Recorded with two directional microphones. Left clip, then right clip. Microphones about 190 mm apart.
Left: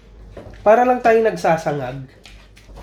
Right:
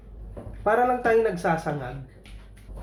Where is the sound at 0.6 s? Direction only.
35° left (ahead or behind).